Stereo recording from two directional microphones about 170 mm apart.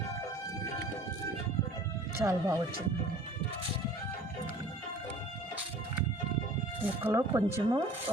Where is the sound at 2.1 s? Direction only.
20° right (ahead or behind).